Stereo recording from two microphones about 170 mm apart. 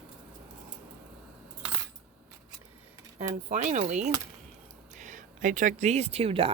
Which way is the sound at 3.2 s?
45° right (ahead or behind).